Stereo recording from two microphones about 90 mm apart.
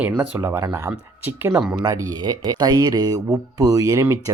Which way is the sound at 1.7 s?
45° right (ahead or behind).